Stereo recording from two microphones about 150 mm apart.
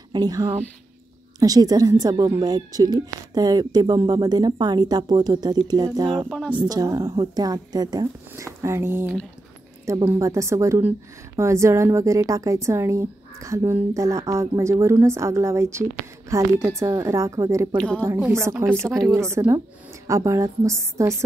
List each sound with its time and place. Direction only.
0.1 s a woman's voice: 25° right (ahead or behind)
6.3 s speech: 5° left (ahead or behind)
6.7 s a woman's voice: 25° right (ahead or behind)